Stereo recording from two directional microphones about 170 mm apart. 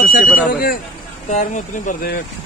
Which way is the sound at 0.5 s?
65° left (ahead or behind).